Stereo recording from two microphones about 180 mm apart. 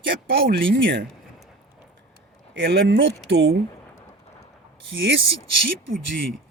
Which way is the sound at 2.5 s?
85° right.